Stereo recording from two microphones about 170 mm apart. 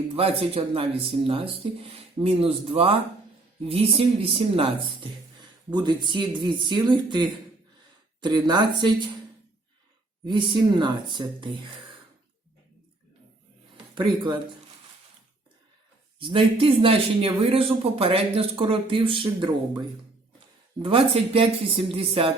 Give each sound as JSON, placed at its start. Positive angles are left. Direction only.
{"t": 0.2, "sound": "a man's voice", "side_deg": -35}
{"t": 10.2, "sound": "speech", "side_deg": -25}
{"t": 13.9, "sound": "speech", "side_deg": -25}
{"t": 16.1, "sound": "a man's voice", "side_deg": -30}
{"t": 20.8, "sound": "a man's voice", "side_deg": -30}